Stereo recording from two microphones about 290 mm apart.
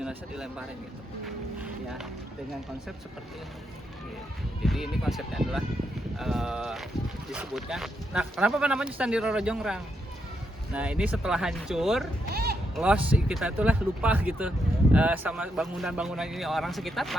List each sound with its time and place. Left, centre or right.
0.0 s a man's voice: centre
4.6 s a man's voice: centre
12.3 s speech: right
12.7 s a man's voice: centre